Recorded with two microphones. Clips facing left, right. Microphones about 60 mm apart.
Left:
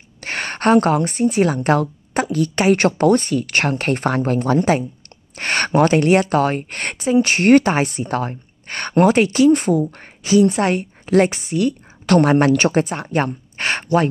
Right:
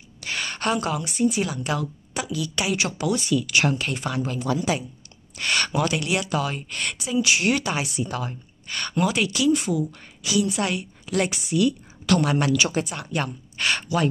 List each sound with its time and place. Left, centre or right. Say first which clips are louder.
0.2 s a woman's voice: left 7 dB; left